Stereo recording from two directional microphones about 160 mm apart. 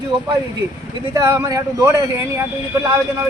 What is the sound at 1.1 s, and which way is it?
Speech, 20° right (ahead or behind).